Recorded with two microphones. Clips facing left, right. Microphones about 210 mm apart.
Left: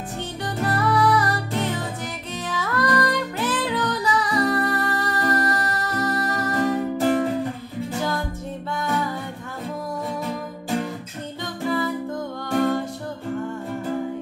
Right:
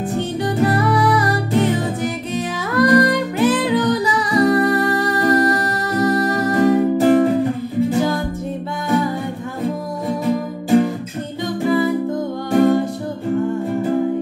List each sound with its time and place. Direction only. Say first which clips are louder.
0.6 s music: right 4 dB; 10° right (ahead or behind)
7.0 s music: right 6 dB; 55° right (ahead or behind)
11.6 s music: right 7 dB; 10° right (ahead or behind)